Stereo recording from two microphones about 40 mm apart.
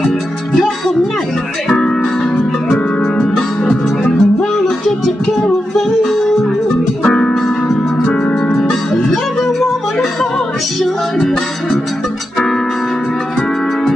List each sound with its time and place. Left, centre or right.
3.0 s music: centre
7.0 s music: centre
8.0 s music: left
8.5 s music: centre